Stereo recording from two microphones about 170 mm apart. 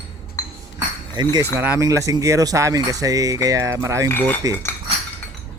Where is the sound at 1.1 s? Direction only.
25° right (ahead or behind).